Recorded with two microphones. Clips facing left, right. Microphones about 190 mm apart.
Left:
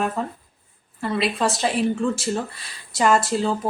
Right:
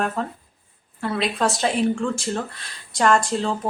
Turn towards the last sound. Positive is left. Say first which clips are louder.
# left 1 dB
turn(degrees=5)  # may be behind; listen again after turning